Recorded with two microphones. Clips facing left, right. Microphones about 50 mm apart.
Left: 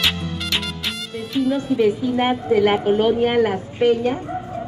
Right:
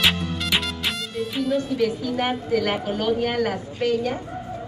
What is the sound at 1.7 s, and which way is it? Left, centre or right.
A woman's voice, left.